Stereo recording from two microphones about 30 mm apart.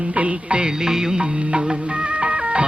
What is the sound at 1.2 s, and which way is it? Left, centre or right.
Music, right.